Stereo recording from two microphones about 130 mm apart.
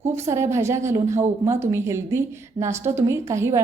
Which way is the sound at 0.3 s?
20° right (ahead or behind).